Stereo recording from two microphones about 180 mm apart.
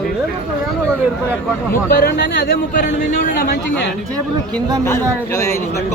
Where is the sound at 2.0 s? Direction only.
70° left (ahead or behind).